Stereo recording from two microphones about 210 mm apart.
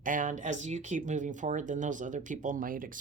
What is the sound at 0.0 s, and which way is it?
Speech, 40° right (ahead or behind).